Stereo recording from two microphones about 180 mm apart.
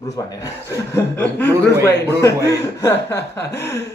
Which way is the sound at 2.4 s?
15° left (ahead or behind).